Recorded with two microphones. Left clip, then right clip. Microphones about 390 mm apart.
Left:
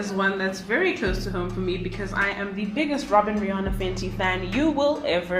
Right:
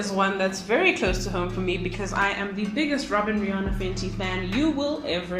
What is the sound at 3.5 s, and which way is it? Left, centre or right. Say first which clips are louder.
Speech: left 2 dB; centre.